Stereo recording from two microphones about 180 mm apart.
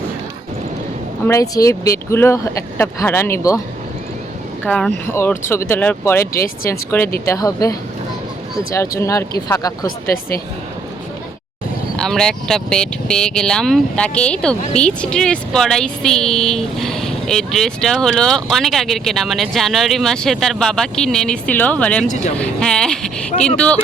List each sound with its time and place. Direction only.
1.3 s speech: 20° left (ahead or behind)
4.6 s speech: 10° left (ahead or behind)
9.0 s speech: 15° left (ahead or behind)
11.9 s speech: 5° left (ahead or behind)
22.0 s speech: 40° left (ahead or behind)
22.4 s speech: 5° left (ahead or behind)